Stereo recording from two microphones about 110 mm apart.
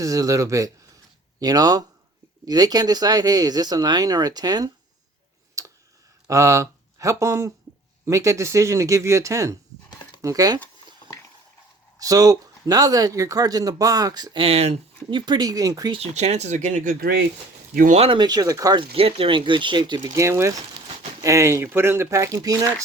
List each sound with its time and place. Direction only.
0.0 s speech: 30° right (ahead or behind)
5.6 s tick: 30° right (ahead or behind)
6.2 s speech: 30° right (ahead or behind)
11.9 s speech: 35° right (ahead or behind)
14.3 s speech: 65° right (ahead or behind)
15.1 s speech: 40° right (ahead or behind)
16.0 s speech: 90° right
18.1 s speech: 40° right (ahead or behind)
18.8 s speech: 60° right (ahead or behind); by 22.7 s 30° right (ahead or behind)